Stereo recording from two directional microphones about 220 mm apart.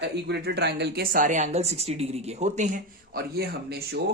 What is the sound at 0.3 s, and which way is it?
A woman's voice, 50° right (ahead or behind).